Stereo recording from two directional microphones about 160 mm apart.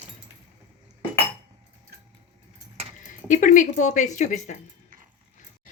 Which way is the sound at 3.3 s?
50° left (ahead or behind).